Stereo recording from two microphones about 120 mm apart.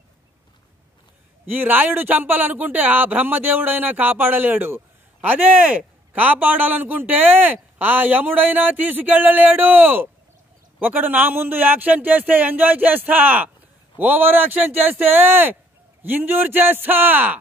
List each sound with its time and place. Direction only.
1.4 s speech: 15° right (ahead or behind)